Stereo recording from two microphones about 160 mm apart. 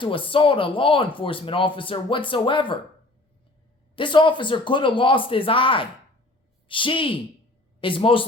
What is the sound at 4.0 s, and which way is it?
Speech, 30° left (ahead or behind).